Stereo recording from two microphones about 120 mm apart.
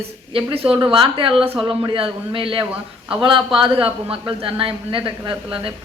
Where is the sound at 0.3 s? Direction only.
50° right (ahead or behind).